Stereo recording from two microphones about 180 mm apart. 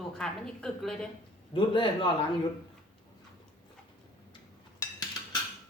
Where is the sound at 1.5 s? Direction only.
25° left (ahead or behind).